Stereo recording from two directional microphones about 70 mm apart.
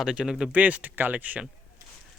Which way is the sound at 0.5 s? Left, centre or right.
Right.